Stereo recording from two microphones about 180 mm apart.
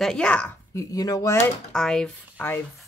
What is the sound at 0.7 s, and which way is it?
Speech, 20° left (ahead or behind).